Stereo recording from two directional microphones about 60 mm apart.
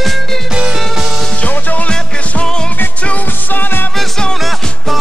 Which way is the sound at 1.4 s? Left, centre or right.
Left.